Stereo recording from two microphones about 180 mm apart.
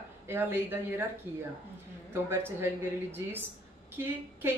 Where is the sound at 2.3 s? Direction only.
15° right (ahead or behind).